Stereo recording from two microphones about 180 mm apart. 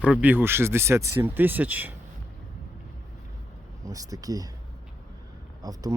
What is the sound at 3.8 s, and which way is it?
Speech, 20° right (ahead or behind).